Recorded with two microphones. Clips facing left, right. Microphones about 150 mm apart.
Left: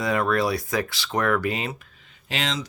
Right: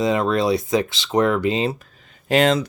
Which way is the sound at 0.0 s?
20° right (ahead or behind).